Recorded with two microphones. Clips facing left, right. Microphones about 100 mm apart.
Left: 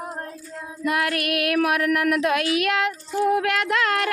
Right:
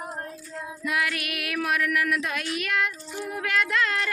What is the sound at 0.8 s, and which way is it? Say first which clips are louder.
Speech: left 5 dB; 50° left (ahead or behind).